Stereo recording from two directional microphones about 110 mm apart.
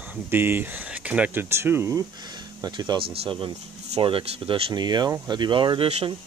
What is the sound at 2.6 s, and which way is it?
Speech, 40° right (ahead or behind).